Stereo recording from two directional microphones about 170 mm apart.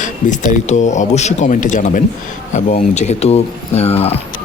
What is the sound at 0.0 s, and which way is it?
Speech, 50° left (ahead or behind).